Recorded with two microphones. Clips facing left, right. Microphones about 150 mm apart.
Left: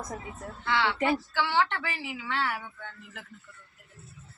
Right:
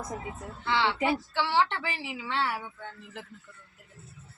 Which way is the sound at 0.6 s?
25° right (ahead or behind).